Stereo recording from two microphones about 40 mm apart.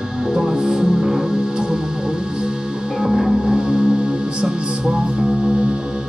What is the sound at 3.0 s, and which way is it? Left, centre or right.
Music, centre.